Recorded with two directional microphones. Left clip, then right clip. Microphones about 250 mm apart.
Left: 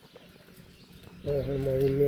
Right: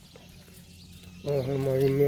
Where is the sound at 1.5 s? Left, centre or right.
Right.